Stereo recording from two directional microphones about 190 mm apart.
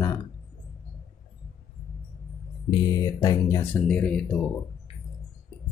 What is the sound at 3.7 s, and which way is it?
Speech, 5° left (ahead or behind).